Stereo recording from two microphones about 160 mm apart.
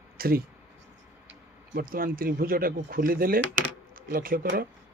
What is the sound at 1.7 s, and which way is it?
Speech, 65° right (ahead or behind).